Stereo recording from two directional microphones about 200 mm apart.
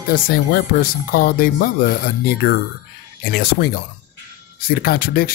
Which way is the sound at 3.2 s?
50° left (ahead or behind).